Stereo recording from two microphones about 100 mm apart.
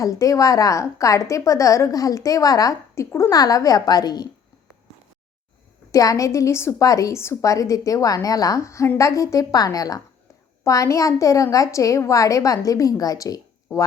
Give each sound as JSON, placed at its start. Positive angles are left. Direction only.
{"t": 0.0, "sound": "a woman's voice", "side_deg": 35}
{"t": 5.9, "sound": "a woman's voice", "side_deg": 35}